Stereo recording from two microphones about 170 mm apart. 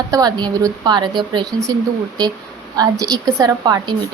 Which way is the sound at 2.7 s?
20° right (ahead or behind).